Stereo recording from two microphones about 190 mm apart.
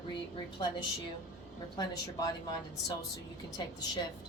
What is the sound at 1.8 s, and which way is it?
A woman's voice, 20° left (ahead or behind).